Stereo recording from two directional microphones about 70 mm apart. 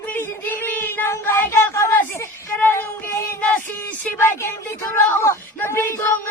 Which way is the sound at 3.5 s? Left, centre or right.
Left.